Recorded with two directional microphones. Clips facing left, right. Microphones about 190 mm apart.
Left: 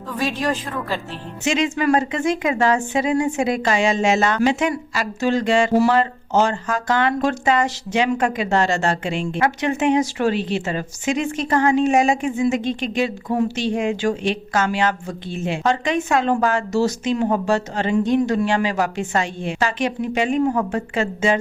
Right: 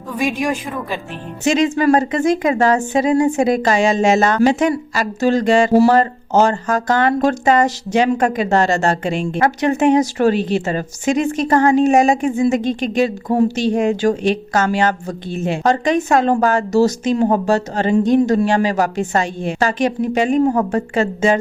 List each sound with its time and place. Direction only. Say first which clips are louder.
0.1 s a woman's voice: right 3 dB; 15° right (ahead or behind)
1.5 s a woman's voice: right 5 dB; 40° right (ahead or behind)